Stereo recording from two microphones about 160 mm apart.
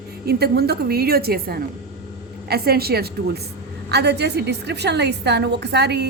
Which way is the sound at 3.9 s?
90° right.